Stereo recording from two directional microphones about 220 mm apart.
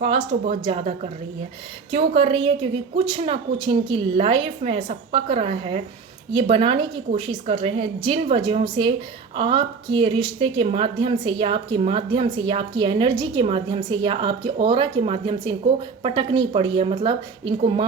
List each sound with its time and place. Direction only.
0.0 s a woman's voice: 30° right (ahead or behind)